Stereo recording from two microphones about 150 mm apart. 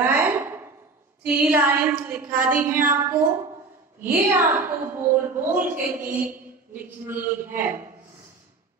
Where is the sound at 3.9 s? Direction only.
10° right (ahead or behind).